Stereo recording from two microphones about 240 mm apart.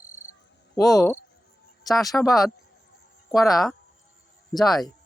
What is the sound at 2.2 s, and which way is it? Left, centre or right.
Speech, centre.